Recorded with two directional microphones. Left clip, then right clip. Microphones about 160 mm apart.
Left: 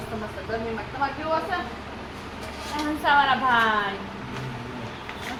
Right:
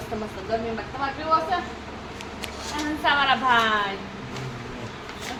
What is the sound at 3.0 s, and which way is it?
Speech, 10° left (ahead or behind).